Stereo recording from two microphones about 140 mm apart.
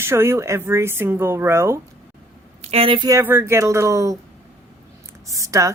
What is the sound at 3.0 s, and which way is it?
Speech, 20° right (ahead or behind).